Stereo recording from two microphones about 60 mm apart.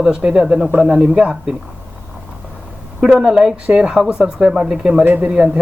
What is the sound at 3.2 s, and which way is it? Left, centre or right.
A man's voice, centre.